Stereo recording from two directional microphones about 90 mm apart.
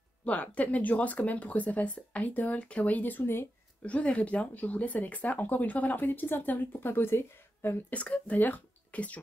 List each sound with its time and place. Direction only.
0.2 s speech: 15° left (ahead or behind)